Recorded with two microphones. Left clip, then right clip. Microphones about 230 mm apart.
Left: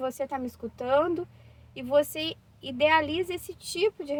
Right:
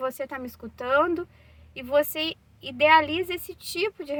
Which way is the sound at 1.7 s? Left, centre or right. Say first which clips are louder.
Right 1 dB; centre.